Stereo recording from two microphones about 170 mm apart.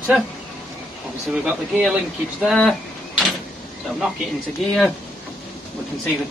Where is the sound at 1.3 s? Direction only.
Centre (ahead or behind).